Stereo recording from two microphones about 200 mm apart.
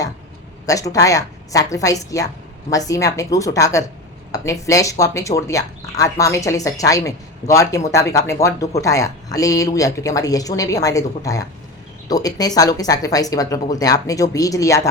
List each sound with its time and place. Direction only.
0.6 s speech: 15° left (ahead or behind)